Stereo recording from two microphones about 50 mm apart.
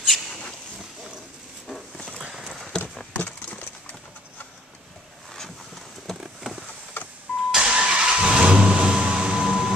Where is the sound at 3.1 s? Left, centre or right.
Left.